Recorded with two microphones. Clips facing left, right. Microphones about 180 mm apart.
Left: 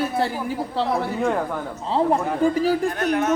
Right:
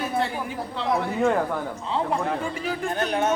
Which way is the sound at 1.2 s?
Centre (ahead or behind).